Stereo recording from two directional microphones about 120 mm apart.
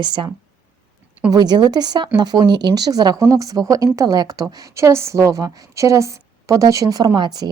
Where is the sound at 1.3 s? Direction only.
35° right (ahead or behind).